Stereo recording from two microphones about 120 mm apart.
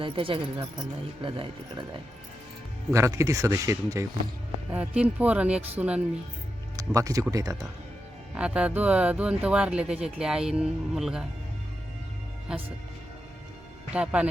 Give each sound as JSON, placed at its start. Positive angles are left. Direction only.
{"t": 0.0, "sound": "speech", "side_deg": -45}
{"t": 2.9, "sound": "speech", "side_deg": -25}
{"t": 4.7, "sound": "speech", "side_deg": -10}
{"t": 6.7, "sound": "speech", "side_deg": -25}
{"t": 8.4, "sound": "speech", "side_deg": -10}
{"t": 13.9, "sound": "speech", "side_deg": -10}